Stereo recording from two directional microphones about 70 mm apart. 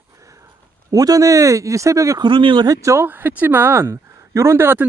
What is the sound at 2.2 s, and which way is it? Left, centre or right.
Speech, right.